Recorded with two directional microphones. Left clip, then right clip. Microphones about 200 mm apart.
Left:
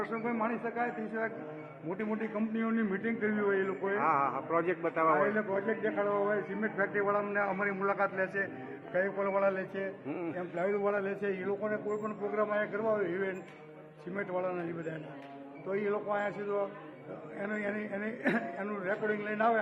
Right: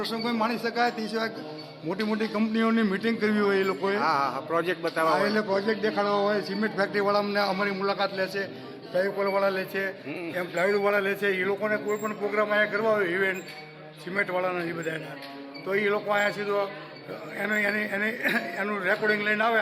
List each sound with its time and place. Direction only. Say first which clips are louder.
0.3 s a man's voice: right 8 dB; 90° right; by 3.9 s 70° right (ahead or behind)
3.9 s speech: right 2 dB; 5° right (ahead or behind)
5.3 s a man's voice: right 6 dB; 85° right
7.6 s a man's voice: right 4 dB; 45° right (ahead or behind)
9.0 s a man's voice: right 5 dB; 20° right (ahead or behind)
10.1 s a man's voice: right 3 dB; 10° left (ahead or behind)
10.3 s a man's voice: right 9 dB; 15° right (ahead or behind)